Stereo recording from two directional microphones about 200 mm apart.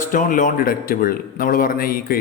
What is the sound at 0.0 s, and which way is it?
Speech, 40° left (ahead or behind).